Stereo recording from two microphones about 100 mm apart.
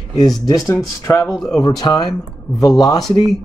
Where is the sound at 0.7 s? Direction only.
35° left (ahead or behind).